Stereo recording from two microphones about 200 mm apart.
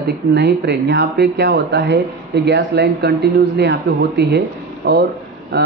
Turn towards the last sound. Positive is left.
turn(degrees=-55)  # may be behind; listen again after turning